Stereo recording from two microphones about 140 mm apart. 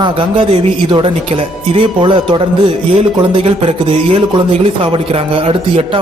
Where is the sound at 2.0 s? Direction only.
35° right (ahead or behind).